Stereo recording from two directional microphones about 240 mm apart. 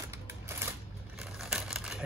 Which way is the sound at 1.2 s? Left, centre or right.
Centre.